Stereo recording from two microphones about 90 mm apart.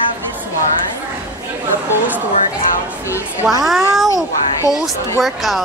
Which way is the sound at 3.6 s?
Centre (ahead or behind).